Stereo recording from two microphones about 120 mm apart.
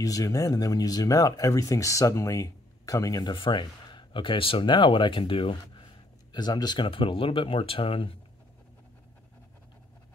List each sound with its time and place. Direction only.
0.0 s speech: 30° left (ahead or behind); by 5.9 s 45° left (ahead or behind)
6.3 s speech: 35° left (ahead or behind)